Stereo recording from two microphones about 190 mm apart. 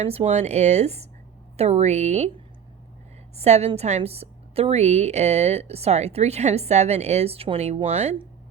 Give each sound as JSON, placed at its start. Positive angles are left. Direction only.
{"t": 0.0, "sound": "a woman's voice", "side_deg": -35}
{"t": 3.3, "sound": "a woman's voice", "side_deg": -35}